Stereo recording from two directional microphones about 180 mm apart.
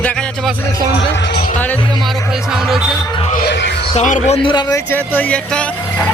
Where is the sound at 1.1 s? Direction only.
70° left (ahead or behind); by 1.6 s 55° left (ahead or behind).